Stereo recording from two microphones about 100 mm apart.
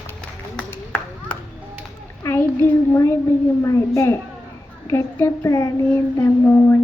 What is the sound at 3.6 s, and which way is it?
Child singing, 30° left (ahead or behind).